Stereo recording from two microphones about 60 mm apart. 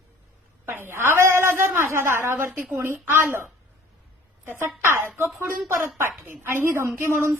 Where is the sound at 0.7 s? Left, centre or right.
Right.